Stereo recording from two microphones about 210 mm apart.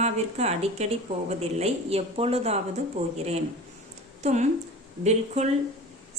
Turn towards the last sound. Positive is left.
turn(degrees=-30)  # may be behind; listen again after turning